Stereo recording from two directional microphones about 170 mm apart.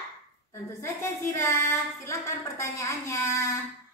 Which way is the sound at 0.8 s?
20° left (ahead or behind).